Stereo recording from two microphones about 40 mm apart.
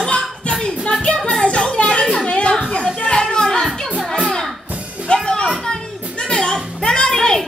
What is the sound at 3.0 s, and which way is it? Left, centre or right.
Children playing, left.